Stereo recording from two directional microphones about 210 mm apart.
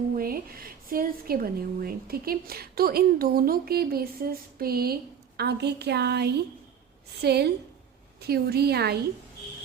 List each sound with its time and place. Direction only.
0.2 s a woman's voice: 45° right (ahead or behind)